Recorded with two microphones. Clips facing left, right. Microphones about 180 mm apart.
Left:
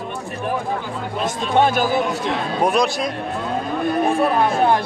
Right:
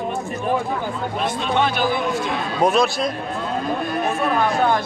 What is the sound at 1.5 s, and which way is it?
Speech, 45° left (ahead or behind).